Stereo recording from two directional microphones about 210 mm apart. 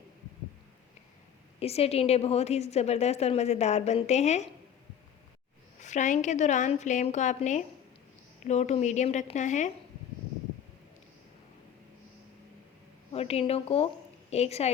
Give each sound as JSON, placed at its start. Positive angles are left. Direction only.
{"t": 1.5, "sound": "a woman's voice", "side_deg": 30}
{"t": 5.8, "sound": "a woman's voice", "side_deg": 35}
{"t": 13.1, "sound": "a woman's voice", "side_deg": 30}